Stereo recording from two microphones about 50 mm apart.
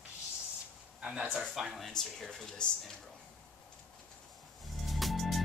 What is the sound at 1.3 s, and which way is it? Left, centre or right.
Speech, centre.